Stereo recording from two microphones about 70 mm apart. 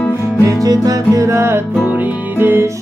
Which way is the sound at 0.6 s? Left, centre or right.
Right.